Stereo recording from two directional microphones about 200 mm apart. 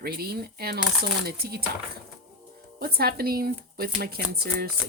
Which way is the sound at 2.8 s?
50° right (ahead or behind).